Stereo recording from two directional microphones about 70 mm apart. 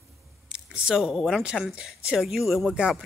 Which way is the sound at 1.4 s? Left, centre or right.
Centre.